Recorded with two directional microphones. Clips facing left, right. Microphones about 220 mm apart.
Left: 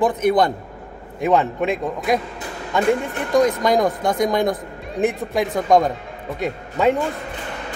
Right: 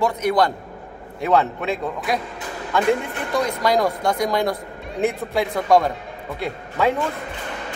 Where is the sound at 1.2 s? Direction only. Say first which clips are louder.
Left 2 dB; 15° left (ahead or behind).